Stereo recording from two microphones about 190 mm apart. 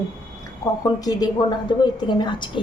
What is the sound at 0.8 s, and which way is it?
A woman's voice, 20° left (ahead or behind).